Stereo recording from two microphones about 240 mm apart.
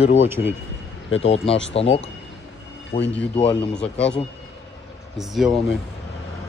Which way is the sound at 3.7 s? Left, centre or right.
Centre.